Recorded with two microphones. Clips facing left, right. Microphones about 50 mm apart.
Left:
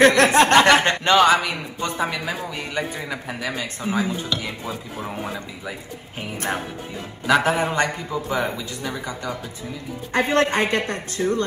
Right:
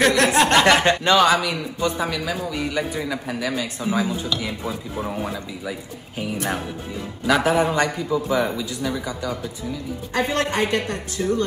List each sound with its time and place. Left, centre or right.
0.0 s a man's voice: left
5.7 s a man's voice: left